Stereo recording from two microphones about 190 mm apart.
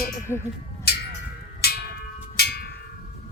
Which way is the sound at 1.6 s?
55° left (ahead or behind).